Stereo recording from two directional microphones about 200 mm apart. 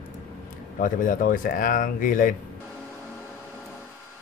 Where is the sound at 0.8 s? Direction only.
45° left (ahead or behind).